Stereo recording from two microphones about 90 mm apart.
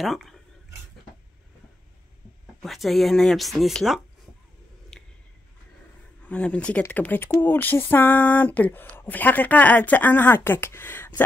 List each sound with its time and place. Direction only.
0.0 s speech: centre (ahead or behind)
2.6 s speech: centre (ahead or behind)
4.9 s a sound: 5° left (ahead or behind)
6.2 s speech: 15° left (ahead or behind)